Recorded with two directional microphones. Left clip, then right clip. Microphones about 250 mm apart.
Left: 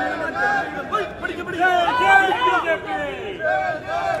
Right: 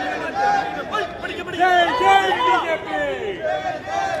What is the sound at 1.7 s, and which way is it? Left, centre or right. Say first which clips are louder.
Speech: right 2 dB; right.